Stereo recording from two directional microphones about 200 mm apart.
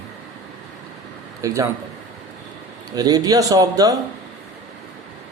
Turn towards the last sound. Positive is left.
turn(degrees=-20)  # may be behind; listen again after turning